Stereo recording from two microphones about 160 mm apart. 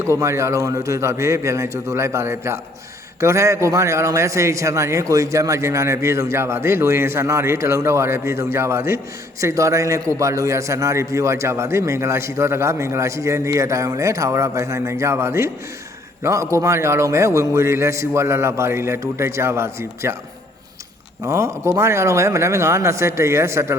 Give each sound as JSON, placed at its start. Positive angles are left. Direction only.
{"t": 0.0, "sound": "a man's voice", "side_deg": -15}
{"t": 21.2, "sound": "a man's voice", "side_deg": -20}